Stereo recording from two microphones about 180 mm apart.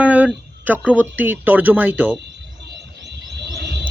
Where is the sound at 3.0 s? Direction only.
70° right (ahead or behind).